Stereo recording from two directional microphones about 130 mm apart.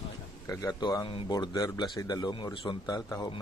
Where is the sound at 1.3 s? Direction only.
30° left (ahead or behind).